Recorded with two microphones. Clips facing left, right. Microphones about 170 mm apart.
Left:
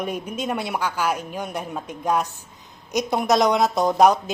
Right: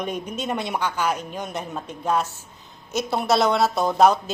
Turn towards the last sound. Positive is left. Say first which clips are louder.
# left 1 dB
turn(degrees=15)  # may be behind; listen again after turning